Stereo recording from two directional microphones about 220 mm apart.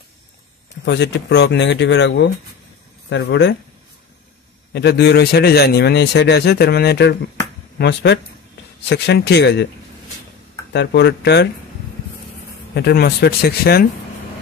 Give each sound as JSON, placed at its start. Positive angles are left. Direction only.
{"t": 0.8, "sound": "a man's voice", "side_deg": 50}
{"t": 4.7, "sound": "a man's voice", "side_deg": 50}
{"t": 10.7, "sound": "a man's voice", "side_deg": 50}
{"t": 12.7, "sound": "a man's voice", "side_deg": 45}